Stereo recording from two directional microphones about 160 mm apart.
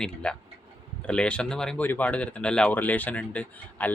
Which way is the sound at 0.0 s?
5° left (ahead or behind).